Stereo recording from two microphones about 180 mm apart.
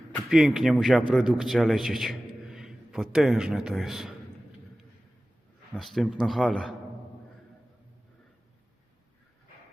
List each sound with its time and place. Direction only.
0.3 s a man's voice: 5° right (ahead or behind)
5.7 s a man's voice: centre (ahead or behind)